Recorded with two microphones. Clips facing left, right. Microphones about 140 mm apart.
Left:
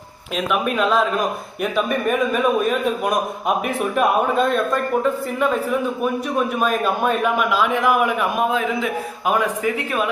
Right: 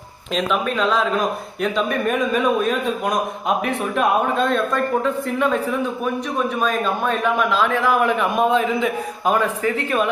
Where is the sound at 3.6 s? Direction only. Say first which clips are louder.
Left 2 dB; 5° left (ahead or behind).